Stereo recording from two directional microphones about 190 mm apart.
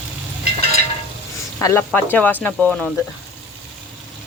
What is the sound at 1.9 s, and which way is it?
Speech, 10° left (ahead or behind).